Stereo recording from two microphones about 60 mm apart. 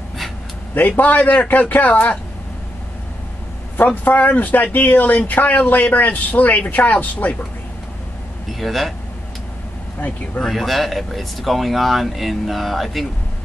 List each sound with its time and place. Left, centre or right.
0.7 s speech: left
3.7 s speech: left
8.5 s speech: centre
9.9 s speech: left
10.4 s speech: centre